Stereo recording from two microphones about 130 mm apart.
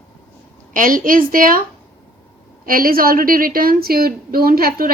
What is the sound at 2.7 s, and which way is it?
A woman's voice, 90° right.